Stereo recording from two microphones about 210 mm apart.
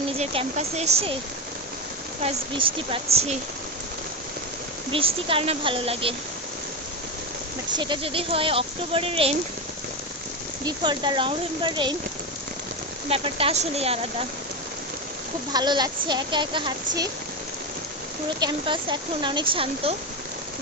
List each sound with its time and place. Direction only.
0.2 s speech: 30° right (ahead or behind)
2.2 s speech: 25° right (ahead or behind)
4.9 s speech: 25° right (ahead or behind)
7.8 s speech: 25° right (ahead or behind)
10.7 s speech: 20° right (ahead or behind)
13.1 s speech: 25° right (ahead or behind)
15.5 s speech: 20° right (ahead or behind)
18.3 s speech: 20° right (ahead or behind)